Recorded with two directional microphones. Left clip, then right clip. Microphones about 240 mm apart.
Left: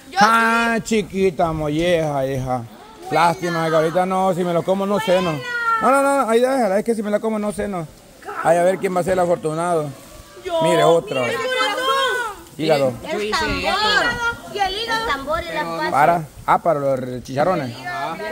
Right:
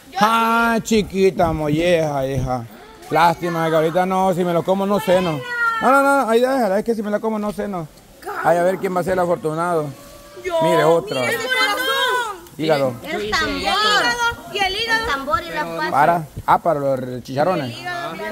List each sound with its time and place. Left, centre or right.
0.2 s speech: centre
11.8 s children playing: right
12.5 s speech: centre
13.0 s speech: centre
14.1 s a sound: right
15.0 s speech: centre
15.9 s speech: centre